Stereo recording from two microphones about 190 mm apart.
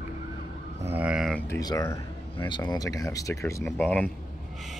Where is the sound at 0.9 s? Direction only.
5° right (ahead or behind).